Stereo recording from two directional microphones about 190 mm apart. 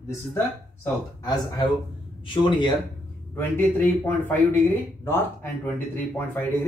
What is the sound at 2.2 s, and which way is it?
Speech, 25° left (ahead or behind).